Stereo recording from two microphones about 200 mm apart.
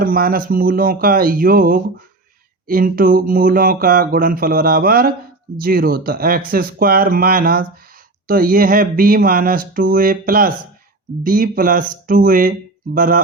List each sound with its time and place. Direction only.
0.0 s speech: 45° right (ahead or behind)